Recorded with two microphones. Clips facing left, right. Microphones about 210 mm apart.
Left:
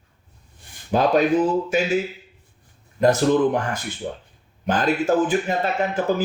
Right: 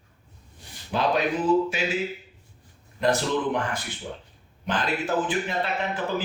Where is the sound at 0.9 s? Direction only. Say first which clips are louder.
Left 6 dB; 45° left (ahead or behind).